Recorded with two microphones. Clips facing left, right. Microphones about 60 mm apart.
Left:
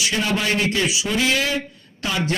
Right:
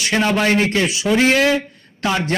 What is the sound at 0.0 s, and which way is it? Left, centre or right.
A man's voice, right.